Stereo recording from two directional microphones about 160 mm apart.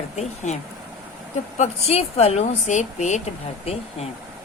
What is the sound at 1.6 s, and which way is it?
Speech, 40° left (ahead or behind).